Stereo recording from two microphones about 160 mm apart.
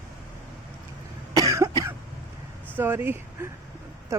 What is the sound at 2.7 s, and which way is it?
Speech, 10° right (ahead or behind).